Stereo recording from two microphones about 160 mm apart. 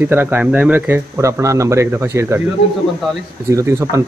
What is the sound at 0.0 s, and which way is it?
Speech, 10° right (ahead or behind).